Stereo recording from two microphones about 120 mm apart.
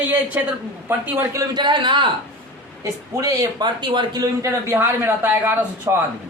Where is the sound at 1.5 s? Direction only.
40° right (ahead or behind).